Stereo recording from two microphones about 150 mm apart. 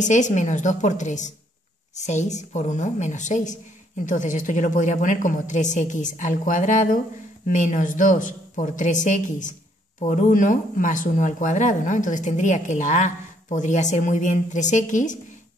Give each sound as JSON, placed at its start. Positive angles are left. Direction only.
{"t": 0.0, "sound": "a woman's voice", "side_deg": 55}